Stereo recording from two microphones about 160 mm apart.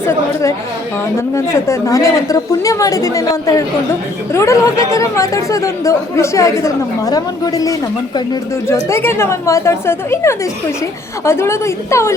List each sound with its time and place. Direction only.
0.0 s a woman's voice: 15° left (ahead or behind)